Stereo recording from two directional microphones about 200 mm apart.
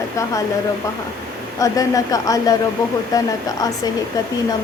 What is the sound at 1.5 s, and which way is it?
Speech, 15° left (ahead or behind).